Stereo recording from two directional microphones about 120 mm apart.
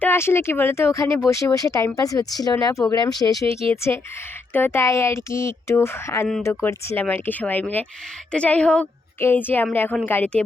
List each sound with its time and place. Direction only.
0.0 s speech: 20° left (ahead or behind)
3.8 s speech: 20° left (ahead or behind)